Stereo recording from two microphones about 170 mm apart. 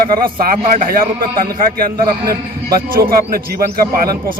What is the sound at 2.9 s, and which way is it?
Speech, 60° right (ahead or behind).